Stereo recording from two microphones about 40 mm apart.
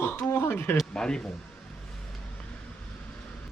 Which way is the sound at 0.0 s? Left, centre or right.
Left.